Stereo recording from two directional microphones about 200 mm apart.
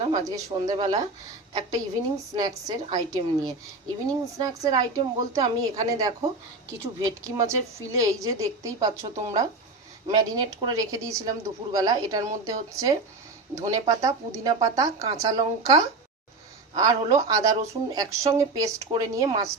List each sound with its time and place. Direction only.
0.1 s a woman's voice: 15° right (ahead or behind)